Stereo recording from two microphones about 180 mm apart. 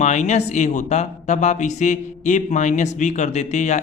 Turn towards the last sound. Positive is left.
turn(degrees=40)  # may be behind; listen again after turning